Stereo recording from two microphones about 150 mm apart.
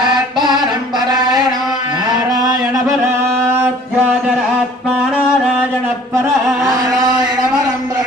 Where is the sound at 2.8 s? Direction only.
15° right (ahead or behind).